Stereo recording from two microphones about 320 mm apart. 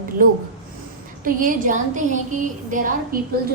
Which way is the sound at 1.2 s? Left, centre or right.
Right.